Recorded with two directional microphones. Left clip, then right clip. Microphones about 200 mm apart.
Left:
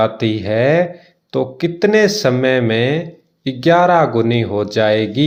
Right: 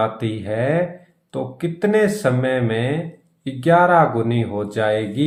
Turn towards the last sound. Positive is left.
turn(degrees=40)  # may be behind; listen again after turning